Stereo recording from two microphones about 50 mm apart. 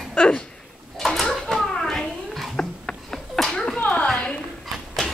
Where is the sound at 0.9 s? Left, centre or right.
Centre.